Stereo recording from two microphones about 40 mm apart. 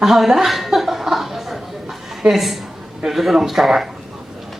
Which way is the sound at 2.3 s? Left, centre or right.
Centre.